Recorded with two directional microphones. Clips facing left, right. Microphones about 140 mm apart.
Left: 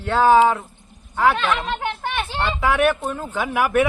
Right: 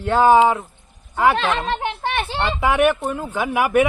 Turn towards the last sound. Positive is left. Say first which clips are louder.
# right 2 dB
turn(degrees=-15)  # may be behind; listen again after turning